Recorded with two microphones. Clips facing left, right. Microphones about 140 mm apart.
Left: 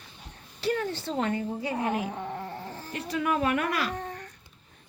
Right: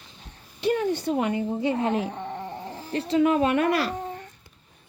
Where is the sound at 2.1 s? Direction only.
Centre (ahead or behind).